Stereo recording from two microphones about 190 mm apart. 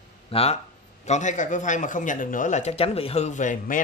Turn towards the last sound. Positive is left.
turn(degrees=45)  # may be behind; listen again after turning